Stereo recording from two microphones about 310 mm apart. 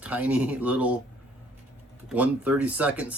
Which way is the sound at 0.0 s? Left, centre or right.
Centre.